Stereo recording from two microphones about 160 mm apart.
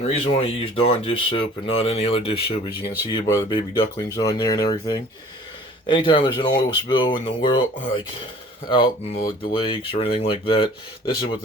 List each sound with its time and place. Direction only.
0.0 s speech: 40° left (ahead or behind)